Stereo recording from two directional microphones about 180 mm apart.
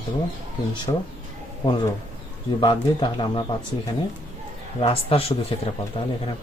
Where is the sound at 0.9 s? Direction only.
25° left (ahead or behind).